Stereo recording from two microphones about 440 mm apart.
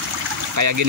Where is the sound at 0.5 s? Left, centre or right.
Right.